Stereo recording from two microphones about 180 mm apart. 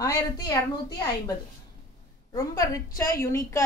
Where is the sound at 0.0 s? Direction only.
20° left (ahead or behind).